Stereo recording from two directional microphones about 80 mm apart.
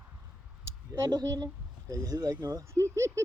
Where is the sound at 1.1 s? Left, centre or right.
Right.